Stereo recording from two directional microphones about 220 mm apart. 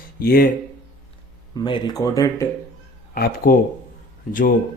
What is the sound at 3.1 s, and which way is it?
Speech, 45° left (ahead or behind).